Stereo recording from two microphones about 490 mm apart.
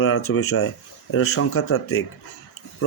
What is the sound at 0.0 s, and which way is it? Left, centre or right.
Speech, left.